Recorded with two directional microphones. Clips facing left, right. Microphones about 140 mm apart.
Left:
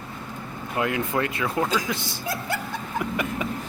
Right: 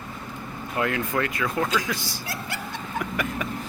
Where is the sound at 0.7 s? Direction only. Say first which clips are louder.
Left 1 dB; 20° left (ahead or behind).